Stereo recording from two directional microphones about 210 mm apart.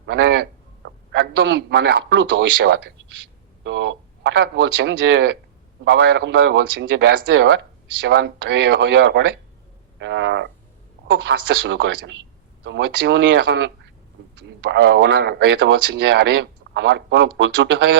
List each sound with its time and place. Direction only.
0.0 s a sound: 50° right (ahead or behind)
3.6 s speech: 60° right (ahead or behind)
10.0 s frog: 55° right (ahead or behind)
11.3 s speech: 60° right (ahead or behind)
14.7 s speech: 55° right (ahead or behind)